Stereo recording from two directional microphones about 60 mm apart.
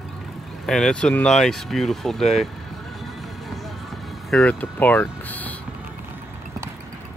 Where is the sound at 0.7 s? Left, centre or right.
Centre.